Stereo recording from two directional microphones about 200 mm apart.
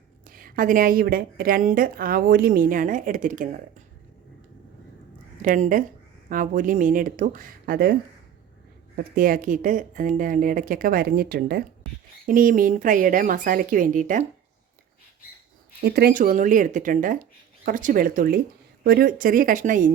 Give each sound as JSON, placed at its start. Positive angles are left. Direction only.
{"t": 0.3, "sound": "a woman's voice", "side_deg": -45}
{"t": 5.4, "sound": "speech", "side_deg": -40}
{"t": 9.1, "sound": "a woman's voice", "side_deg": -45}
{"t": 15.8, "sound": "a woman's voice", "side_deg": -50}